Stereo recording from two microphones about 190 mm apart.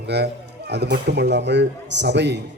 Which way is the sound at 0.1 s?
60° right (ahead or behind).